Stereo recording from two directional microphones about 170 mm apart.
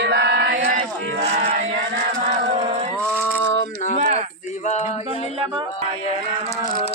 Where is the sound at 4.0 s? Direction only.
40° right (ahead or behind).